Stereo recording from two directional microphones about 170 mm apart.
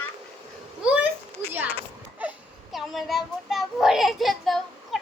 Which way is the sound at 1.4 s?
15° right (ahead or behind).